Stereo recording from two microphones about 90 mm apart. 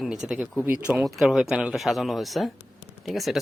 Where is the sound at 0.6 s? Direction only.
20° right (ahead or behind).